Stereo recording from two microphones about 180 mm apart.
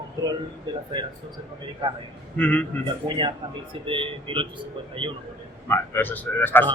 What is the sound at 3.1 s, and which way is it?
Speech, 25° right (ahead or behind).